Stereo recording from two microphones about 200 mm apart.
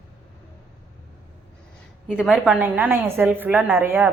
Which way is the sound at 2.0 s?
Centre (ahead or behind).